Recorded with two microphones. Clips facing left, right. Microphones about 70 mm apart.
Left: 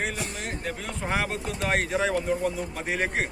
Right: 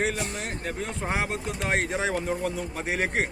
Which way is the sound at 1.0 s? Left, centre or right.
Right.